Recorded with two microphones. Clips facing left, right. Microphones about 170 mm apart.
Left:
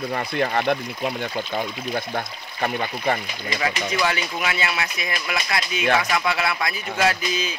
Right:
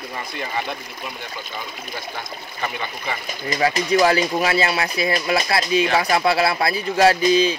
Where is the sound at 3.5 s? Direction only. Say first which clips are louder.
Right 6 dB; 40° right (ahead or behind).